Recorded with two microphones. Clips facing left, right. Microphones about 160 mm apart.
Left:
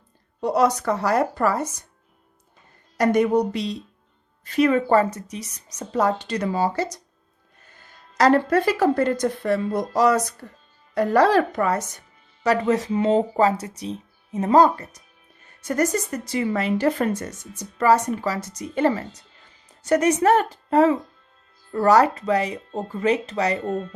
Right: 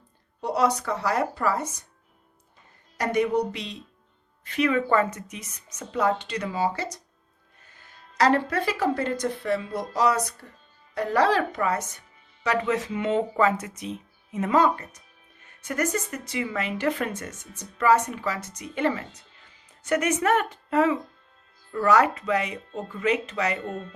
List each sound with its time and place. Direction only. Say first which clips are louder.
0.4 s speech: left 4 dB; 45° left (ahead or behind)
3.0 s speech: left 5 dB; 40° left (ahead or behind)
8.2 s speech: left 5 dB; 45° left (ahead or behind)